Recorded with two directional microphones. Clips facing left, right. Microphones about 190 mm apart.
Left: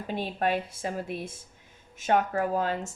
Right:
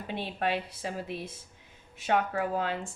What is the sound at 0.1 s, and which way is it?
A woman's voice, 45° left (ahead or behind).